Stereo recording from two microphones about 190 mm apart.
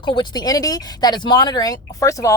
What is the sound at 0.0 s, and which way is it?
Speech, 25° left (ahead or behind).